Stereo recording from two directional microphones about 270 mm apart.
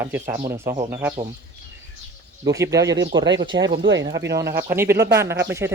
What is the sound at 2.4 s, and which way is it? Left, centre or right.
Speech, centre.